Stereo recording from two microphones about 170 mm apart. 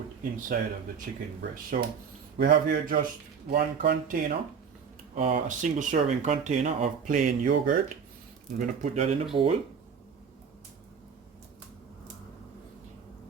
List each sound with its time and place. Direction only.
0.3 s a man's voice: 55° right (ahead or behind)
5.1 s speech: 40° right (ahead or behind)
7.1 s speech: 50° right (ahead or behind)
9.3 s speech: 35° right (ahead or behind)